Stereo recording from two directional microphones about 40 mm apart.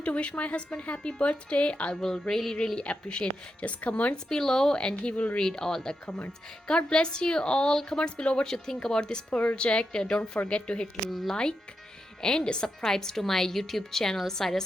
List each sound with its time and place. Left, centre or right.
0.0 s a woman's voice: left
2.0 s a woman's voice: centre
2.7 s a woman's voice: left
4.3 s a woman's voice: centre
5.1 s a woman's voice: left
5.4 s a woman's voice: centre
8.4 s a woman's voice: centre; by 10.8 s left
11.1 s speech: centre
12.2 s a woman's voice: centre